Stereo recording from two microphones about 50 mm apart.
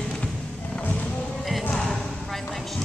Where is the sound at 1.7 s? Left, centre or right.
Centre.